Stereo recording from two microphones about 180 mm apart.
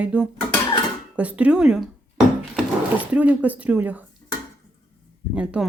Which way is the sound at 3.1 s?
10° right (ahead or behind).